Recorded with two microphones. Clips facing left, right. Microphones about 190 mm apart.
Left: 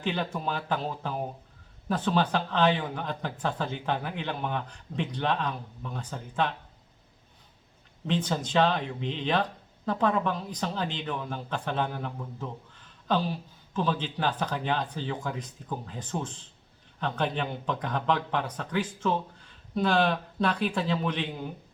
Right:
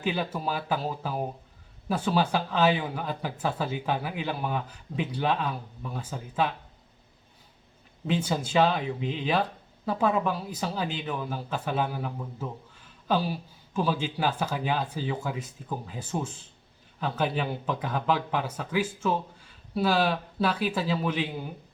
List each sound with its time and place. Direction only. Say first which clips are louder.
0.0 s speech: right 1 dB; 5° right (ahead or behind)
8.0 s speech: right 1 dB; 10° right (ahead or behind)